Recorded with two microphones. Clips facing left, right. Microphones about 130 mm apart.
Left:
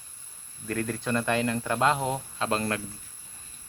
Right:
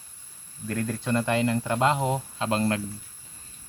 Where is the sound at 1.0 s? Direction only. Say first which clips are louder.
Right 3 dB; 20° right (ahead or behind).